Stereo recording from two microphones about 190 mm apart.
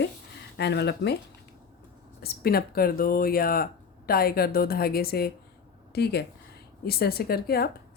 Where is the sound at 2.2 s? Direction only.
55° left (ahead or behind).